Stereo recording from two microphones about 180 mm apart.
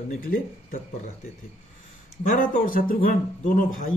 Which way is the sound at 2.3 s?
50° left (ahead or behind).